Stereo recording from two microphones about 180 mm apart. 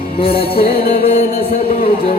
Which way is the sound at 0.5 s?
55° left (ahead or behind).